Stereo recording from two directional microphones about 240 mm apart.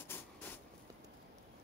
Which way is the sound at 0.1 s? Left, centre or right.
Centre.